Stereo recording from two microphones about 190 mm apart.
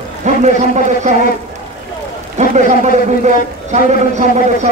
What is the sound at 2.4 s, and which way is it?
A man's voice, 40° right (ahead or behind).